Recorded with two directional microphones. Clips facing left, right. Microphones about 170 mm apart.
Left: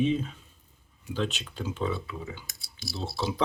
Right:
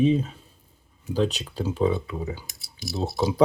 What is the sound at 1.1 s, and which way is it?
Speech, 40° right (ahead or behind).